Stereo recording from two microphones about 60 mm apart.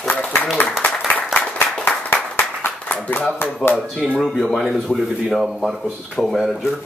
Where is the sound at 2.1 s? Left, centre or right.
Left.